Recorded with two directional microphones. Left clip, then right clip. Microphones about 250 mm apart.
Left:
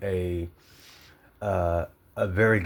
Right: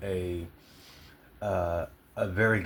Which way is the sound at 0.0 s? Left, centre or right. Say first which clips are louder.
Left 4 dB; left.